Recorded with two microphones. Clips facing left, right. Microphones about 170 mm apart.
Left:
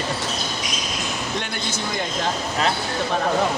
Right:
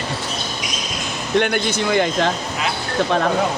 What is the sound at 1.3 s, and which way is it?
Speech, 65° right (ahead or behind).